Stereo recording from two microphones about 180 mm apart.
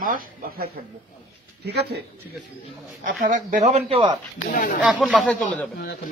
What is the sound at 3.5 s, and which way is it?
Speech, 40° right (ahead or behind).